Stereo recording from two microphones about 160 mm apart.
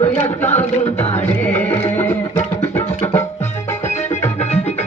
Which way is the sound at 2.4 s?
45° left (ahead or behind).